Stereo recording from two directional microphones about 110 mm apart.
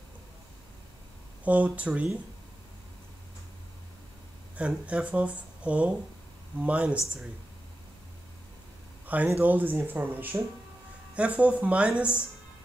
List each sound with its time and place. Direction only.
1.4 s speech: 15° right (ahead or behind)
4.6 s speech: 10° right (ahead or behind)
9.0 s a sound: 15° right (ahead or behind)
9.4 s speech: 15° right (ahead or behind)